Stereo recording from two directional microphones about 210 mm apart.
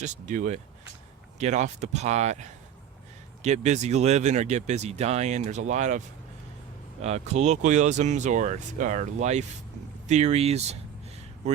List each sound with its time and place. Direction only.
0.0 s speech: 35° right (ahead or behind)
7.0 s speech: 30° right (ahead or behind)